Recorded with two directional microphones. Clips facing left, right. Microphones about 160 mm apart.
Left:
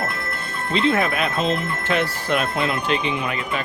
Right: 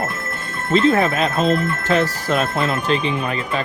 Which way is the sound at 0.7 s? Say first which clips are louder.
Right 5 dB; 40° right (ahead or behind).